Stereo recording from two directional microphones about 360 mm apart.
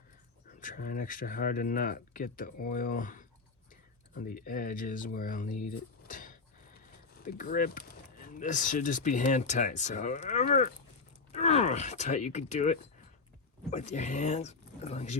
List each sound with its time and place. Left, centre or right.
0.6 s speech: left